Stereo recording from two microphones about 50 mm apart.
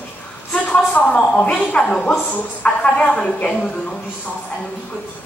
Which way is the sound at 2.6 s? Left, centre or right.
Left.